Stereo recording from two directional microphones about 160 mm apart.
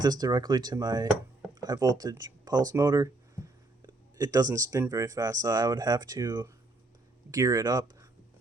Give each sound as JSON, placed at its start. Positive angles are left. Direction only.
{"t": 0.0, "sound": "speech", "side_deg": -25}